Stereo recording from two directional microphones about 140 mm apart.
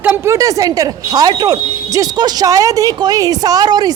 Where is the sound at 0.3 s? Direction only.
25° right (ahead or behind).